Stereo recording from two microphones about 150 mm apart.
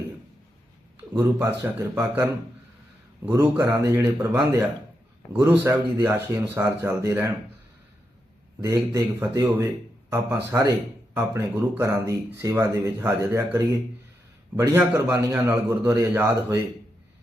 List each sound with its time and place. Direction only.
1.2 s speech: 15° right (ahead or behind)
5.3 s speech: 10° right (ahead or behind)
8.6 s speech: 20° right (ahead or behind)